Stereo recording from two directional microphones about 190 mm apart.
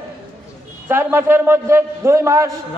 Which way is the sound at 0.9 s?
15° right (ahead or behind).